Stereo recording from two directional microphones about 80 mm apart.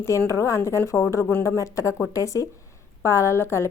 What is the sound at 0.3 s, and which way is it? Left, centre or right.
A woman's voice, left.